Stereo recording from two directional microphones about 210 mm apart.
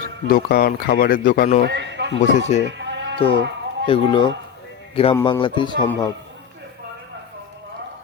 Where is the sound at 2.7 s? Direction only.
60° right (ahead or behind).